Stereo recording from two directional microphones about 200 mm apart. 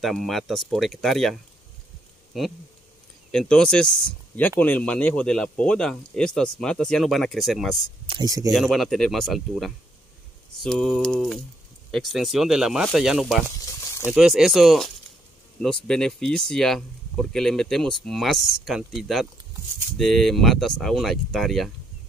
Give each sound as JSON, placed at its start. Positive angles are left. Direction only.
{"t": 0.0, "sound": "speech", "side_deg": 0}
{"t": 8.1, "sound": "speech", "side_deg": -20}
{"t": 8.5, "sound": "speech", "side_deg": 0}